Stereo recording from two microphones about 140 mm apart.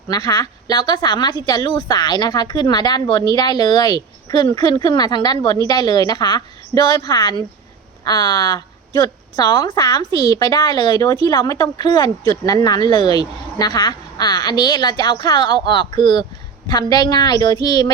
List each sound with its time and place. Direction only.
0.1 s a woman's voice: 30° left (ahead or behind)